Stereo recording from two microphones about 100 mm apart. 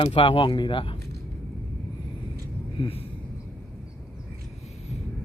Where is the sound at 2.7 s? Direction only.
65° left (ahead or behind).